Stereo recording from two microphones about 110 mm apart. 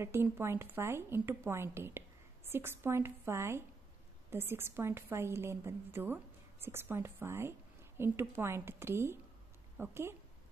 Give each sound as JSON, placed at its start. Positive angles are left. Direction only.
{"t": 0.0, "sound": "a woman's voice", "side_deg": -20}